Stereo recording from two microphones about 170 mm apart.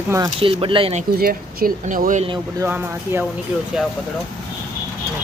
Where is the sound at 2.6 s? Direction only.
15° right (ahead or behind).